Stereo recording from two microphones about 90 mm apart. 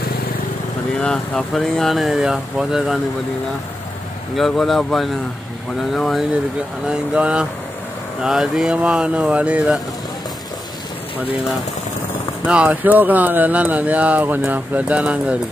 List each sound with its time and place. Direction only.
1.0 s speech: 10° left (ahead or behind)
4.4 s speech: centre (ahead or behind)
6.9 s speech: 10° right (ahead or behind)
12.4 s speech: 15° right (ahead or behind)